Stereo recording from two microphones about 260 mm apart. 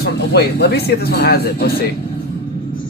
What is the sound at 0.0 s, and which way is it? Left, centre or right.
Speech, left.